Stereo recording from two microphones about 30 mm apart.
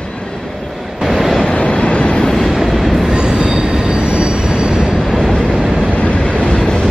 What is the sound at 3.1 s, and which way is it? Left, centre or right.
Train, right.